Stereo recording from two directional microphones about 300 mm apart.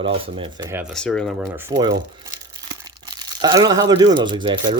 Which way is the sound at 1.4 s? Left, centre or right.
Centre.